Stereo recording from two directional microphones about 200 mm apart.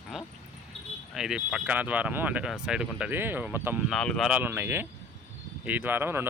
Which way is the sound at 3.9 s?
Centre (ahead or behind).